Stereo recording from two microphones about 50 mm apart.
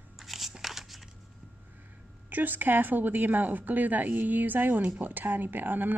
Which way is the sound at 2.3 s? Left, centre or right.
Right.